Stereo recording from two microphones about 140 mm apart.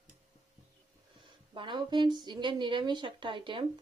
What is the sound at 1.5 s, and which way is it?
Speech, 35° right (ahead or behind).